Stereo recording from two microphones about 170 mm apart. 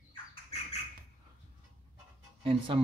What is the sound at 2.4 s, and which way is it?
Speech, 30° right (ahead or behind).